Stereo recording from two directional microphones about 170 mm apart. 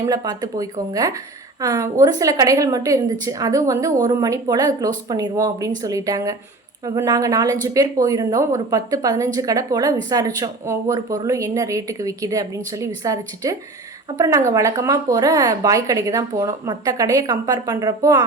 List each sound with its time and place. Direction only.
0.0 s speech: 20° right (ahead or behind)